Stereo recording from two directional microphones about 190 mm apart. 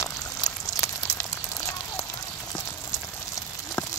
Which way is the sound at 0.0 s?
20° left (ahead or behind).